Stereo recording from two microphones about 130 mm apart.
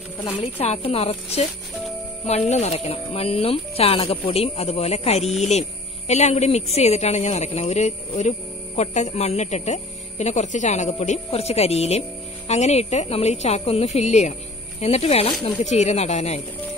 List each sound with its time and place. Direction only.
0.4 s speech: 50° left (ahead or behind)
2.5 s speech: 55° left (ahead or behind)
11.3 s speech: 50° left (ahead or behind)